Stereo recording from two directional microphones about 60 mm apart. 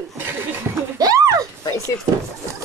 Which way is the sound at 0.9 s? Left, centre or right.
Right.